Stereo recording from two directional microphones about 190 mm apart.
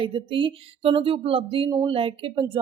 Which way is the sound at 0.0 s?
25° right (ahead or behind).